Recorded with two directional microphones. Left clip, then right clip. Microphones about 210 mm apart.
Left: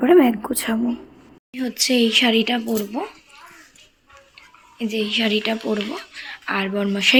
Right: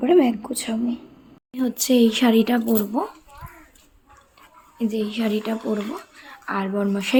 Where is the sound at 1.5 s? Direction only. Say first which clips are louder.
Even; 15° right (ahead or behind).